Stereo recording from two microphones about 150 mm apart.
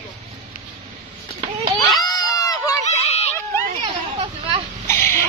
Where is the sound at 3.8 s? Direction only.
40° right (ahead or behind).